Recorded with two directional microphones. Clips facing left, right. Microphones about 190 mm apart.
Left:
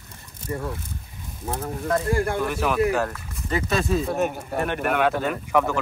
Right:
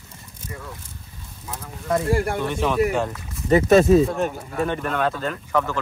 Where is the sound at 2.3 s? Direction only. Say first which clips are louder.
Right 1 dB; centre (ahead or behind).